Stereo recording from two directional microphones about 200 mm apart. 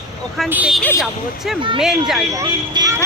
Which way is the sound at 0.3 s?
5° right (ahead or behind).